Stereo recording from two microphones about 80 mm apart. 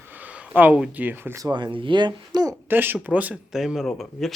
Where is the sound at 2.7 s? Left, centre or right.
Right.